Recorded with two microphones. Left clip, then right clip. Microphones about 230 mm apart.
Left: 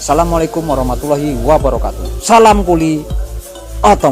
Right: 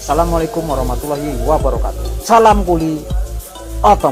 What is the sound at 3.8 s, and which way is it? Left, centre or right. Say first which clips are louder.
Speech: left 1 dB; left.